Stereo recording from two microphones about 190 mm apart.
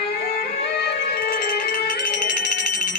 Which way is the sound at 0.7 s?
55° left (ahead or behind).